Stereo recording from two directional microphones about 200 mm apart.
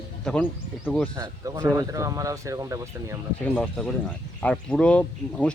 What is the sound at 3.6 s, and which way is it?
Speech, 5° left (ahead or behind).